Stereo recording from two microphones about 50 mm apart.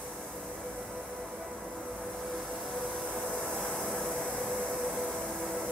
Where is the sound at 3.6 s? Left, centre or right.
Centre.